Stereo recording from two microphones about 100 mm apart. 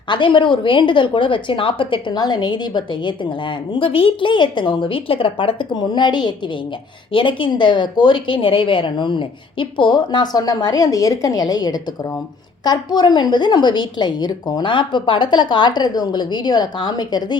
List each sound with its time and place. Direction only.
0.1 s a woman's voice: 55° left (ahead or behind)